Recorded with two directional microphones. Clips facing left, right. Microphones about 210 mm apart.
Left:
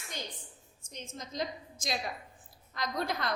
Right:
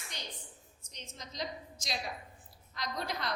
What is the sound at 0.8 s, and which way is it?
A woman's voice, 50° left (ahead or behind).